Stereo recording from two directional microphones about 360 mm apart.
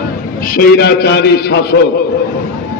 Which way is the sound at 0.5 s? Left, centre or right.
Left.